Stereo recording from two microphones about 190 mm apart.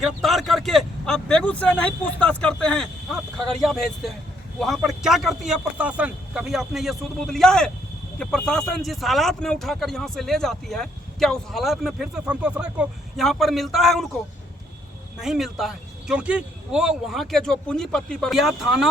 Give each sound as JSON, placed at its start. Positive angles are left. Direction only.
{"t": 0.0, "sound": "a man's voice", "side_deg": 0}
{"t": 15.2, "sound": "a man's voice", "side_deg": 0}